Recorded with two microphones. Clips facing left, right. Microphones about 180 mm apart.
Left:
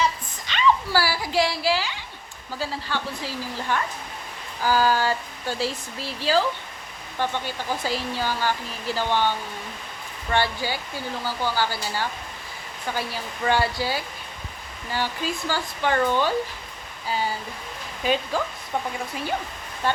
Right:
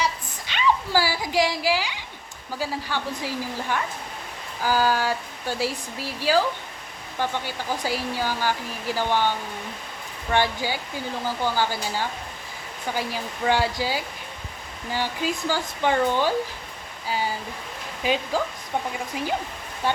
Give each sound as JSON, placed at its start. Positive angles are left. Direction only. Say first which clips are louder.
{"t": 0.0, "sound": "a sound", "louder": "left 2 dB", "side_deg": -10}
{"t": 2.6, "sound": "speech", "louder": "right 1 dB", "side_deg": -15}
{"t": 10.3, "sound": "speech", "louder": "right 1 dB", "side_deg": -15}
{"t": 19.8, "sound": "speech", "louder": "even", "side_deg": -10}